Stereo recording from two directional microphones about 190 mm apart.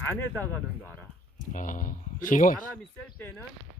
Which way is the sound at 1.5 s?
40° left (ahead or behind).